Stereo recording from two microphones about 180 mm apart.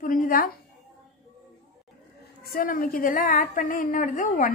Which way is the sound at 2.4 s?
50° left (ahead or behind).